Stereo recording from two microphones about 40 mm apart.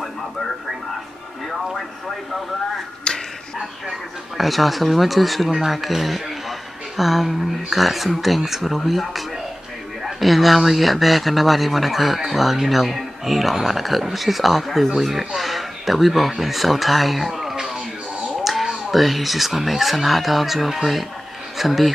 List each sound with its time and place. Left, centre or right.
1.5 s music: centre
3.1 s finger snapping: left
4.4 s speech: centre